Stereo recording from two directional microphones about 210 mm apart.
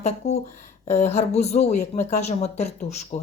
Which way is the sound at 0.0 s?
30° left (ahead or behind).